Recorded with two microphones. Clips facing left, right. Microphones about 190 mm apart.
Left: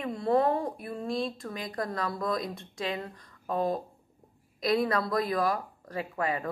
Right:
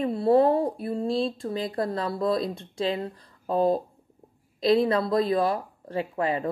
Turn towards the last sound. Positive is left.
turn(degrees=-30)  # may be behind; listen again after turning